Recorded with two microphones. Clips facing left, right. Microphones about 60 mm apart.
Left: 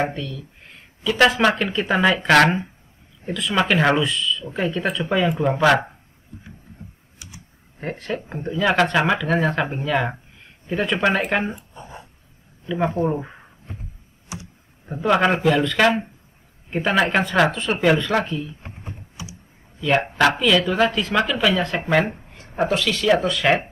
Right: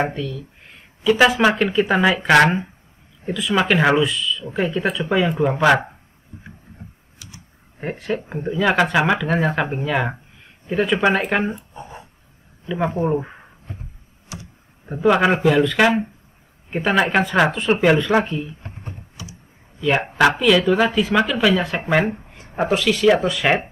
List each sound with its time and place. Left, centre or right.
0.1 s speech: centre
7.8 s speech: centre
12.7 s speech: centre
14.3 s a sound: left
14.9 s speech: centre
19.2 s a sound: left
19.8 s speech: centre